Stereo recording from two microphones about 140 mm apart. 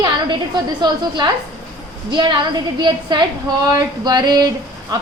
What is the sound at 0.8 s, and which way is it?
A woman's voice, 30° right (ahead or behind).